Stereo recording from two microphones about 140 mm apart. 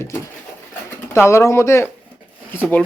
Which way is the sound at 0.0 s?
15° left (ahead or behind).